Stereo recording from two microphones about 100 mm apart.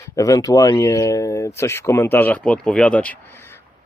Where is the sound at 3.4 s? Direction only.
25° left (ahead or behind).